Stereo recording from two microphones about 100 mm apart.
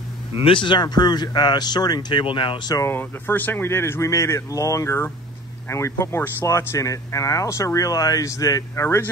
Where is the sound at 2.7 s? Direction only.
25° left (ahead or behind).